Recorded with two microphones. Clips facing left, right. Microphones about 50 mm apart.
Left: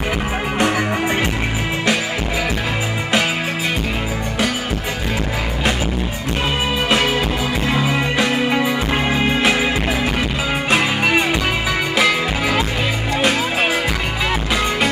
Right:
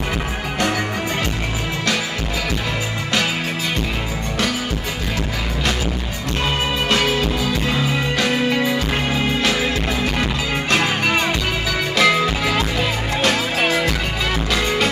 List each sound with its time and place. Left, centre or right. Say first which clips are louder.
6.9 s music: left 1 dB; centre